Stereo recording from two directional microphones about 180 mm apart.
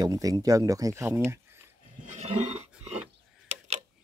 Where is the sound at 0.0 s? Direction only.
20° right (ahead or behind).